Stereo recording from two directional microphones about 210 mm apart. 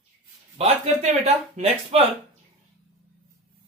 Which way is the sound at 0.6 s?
30° right (ahead or behind).